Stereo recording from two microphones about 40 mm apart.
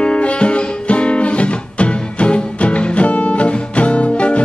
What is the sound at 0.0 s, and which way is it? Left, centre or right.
Music, left.